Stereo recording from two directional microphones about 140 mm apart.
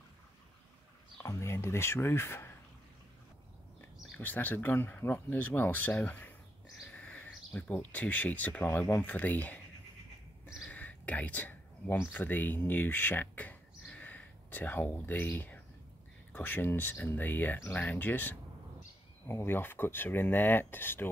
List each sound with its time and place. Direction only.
1.2 s speech: 20° left (ahead or behind)
4.2 s speech: 10° left (ahead or behind)
6.9 s bird: 10° left (ahead or behind)
7.5 s speech: 10° left (ahead or behind)
10.7 s speech: 10° left (ahead or behind)